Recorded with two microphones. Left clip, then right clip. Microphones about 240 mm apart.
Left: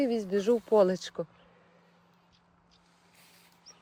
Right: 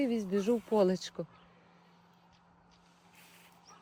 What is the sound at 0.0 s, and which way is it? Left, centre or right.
Speech, left.